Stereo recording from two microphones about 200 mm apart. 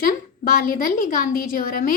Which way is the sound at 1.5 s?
45° left (ahead or behind).